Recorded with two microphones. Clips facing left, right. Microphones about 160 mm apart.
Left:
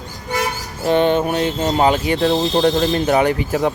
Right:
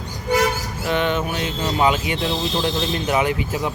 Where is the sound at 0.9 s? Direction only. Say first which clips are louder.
Left 6 dB; 35° left (ahead or behind).